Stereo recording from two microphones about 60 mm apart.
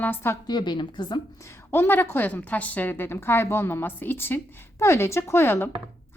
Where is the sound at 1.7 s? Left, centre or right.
Left.